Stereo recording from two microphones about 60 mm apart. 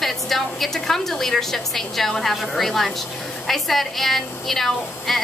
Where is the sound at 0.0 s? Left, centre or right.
Centre.